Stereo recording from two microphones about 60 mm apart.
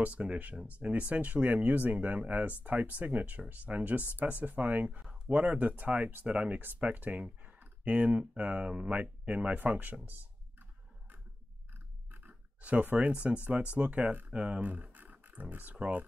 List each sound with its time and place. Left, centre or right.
0.0 s speech: centre
12.1 s speech: right